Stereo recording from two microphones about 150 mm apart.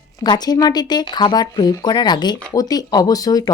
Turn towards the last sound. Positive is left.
turn(degrees=25)  # may be behind; listen again after turning